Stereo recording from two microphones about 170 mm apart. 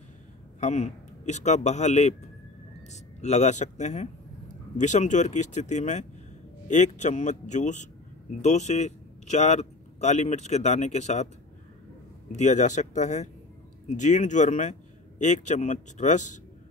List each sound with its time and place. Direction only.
0.6 s a man's voice: 40° left (ahead or behind)
12.3 s a man's voice: 45° left (ahead or behind)